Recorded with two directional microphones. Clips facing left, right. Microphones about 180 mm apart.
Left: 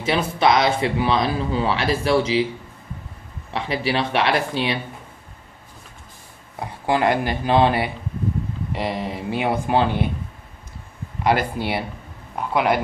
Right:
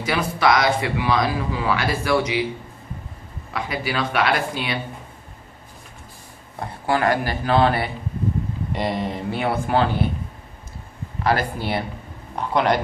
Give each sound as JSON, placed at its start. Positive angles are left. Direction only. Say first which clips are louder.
{"t": 0.0, "sound": "speech", "louder": "left 1 dB", "side_deg": 25}
{"t": 3.5, "sound": "speech", "louder": "left 3 dB", "side_deg": 25}
{"t": 6.6, "sound": "speech", "louder": "left 1 dB", "side_deg": 15}
{"t": 8.7, "sound": "speech", "louder": "right 1 dB", "side_deg": 0}
{"t": 9.3, "sound": "speech", "louder": "left 2 dB", "side_deg": 15}
{"t": 11.2, "sound": "speech", "louder": "left 1 dB", "side_deg": 15}